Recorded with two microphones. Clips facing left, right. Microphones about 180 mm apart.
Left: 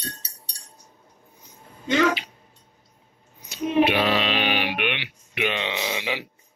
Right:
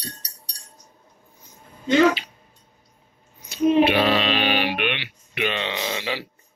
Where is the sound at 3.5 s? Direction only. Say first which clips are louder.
Right 3 dB; 15° left (ahead or behind).